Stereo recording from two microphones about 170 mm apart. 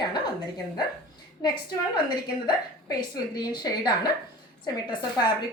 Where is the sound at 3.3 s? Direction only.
25° left (ahead or behind).